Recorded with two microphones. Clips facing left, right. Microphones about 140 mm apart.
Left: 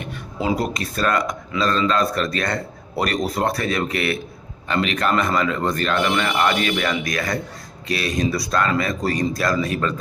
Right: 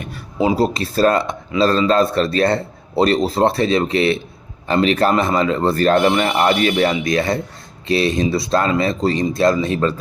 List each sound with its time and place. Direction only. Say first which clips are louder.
0.3 s speech: right 6 dB; 25° right (ahead or behind)